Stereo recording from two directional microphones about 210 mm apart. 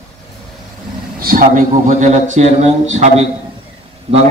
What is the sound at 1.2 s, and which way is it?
A man's voice, 40° right (ahead or behind).